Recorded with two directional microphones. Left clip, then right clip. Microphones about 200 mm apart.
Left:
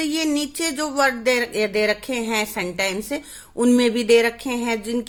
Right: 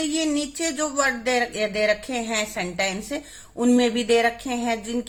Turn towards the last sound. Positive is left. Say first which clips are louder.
# left 2 dB
turn(degrees=35)  # may be behind; listen again after turning